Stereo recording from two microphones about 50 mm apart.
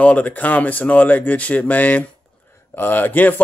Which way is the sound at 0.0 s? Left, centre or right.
Left.